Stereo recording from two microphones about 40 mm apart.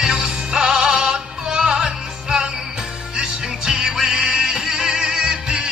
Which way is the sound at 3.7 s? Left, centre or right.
Centre.